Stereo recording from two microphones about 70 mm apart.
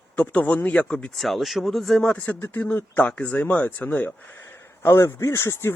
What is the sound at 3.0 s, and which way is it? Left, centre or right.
Speech, centre.